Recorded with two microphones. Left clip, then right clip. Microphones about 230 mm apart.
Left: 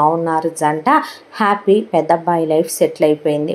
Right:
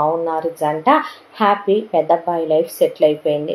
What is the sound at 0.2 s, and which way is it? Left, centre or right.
A woman's voice, left.